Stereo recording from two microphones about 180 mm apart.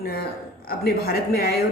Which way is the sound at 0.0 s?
60° left (ahead or behind).